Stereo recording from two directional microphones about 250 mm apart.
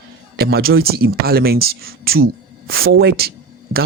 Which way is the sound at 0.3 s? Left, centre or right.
Right.